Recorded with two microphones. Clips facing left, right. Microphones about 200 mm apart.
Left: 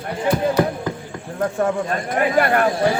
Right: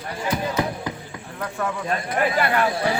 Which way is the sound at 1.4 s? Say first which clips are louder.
Left 8 dB; 45° left (ahead or behind).